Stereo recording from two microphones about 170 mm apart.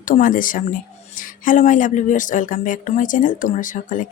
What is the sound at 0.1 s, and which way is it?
Speech, 50° left (ahead or behind).